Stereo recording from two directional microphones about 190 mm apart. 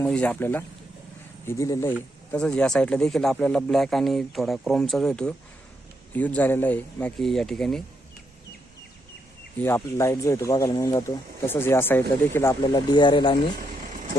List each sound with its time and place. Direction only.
0.0 s speech: 5° left (ahead or behind)
2.3 s speech: 5° left (ahead or behind)
9.6 s speech: 10° left (ahead or behind)